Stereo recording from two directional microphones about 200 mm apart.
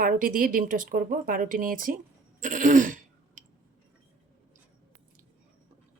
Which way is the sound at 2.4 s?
40° right (ahead or behind).